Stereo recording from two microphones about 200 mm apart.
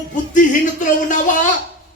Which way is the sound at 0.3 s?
40° left (ahead or behind).